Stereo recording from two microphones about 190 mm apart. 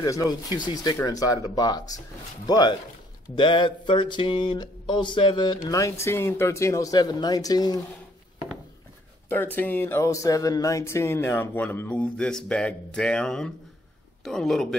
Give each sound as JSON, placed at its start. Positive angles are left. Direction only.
{"t": 0.0, "sound": "speech", "side_deg": 20}
{"t": 9.6, "sound": "music", "side_deg": 10}
{"t": 14.2, "sound": "speech", "side_deg": 0}